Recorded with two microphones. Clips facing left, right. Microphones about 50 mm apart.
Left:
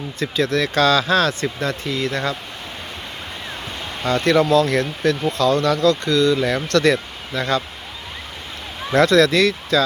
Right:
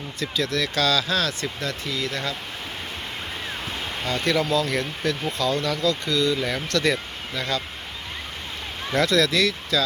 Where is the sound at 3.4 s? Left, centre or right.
Centre.